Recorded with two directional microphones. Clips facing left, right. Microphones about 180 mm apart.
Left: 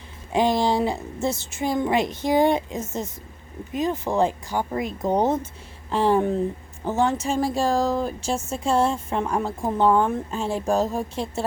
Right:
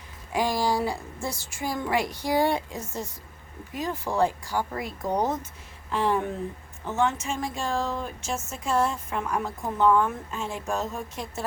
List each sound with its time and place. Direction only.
0.3 s a woman's voice: 25° left (ahead or behind)